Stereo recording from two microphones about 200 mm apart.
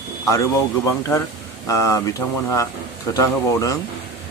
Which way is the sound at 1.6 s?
15° left (ahead or behind).